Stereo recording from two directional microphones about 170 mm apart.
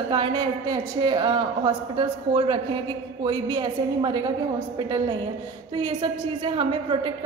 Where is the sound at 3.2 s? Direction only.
25° right (ahead or behind).